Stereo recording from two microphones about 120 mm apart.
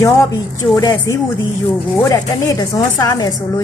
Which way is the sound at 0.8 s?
30° left (ahead or behind).